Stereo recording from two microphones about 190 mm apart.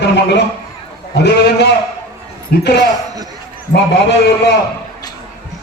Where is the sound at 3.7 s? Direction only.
65° left (ahead or behind).